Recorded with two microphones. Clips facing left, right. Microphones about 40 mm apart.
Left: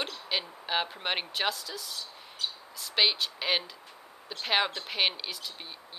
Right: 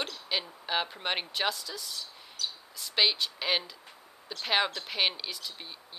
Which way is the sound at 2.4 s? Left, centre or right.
Left.